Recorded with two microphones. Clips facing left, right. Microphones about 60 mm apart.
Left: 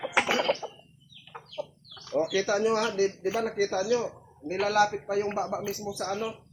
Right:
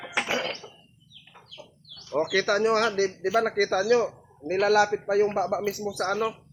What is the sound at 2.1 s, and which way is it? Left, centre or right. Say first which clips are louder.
Speech: right 2 dB; right.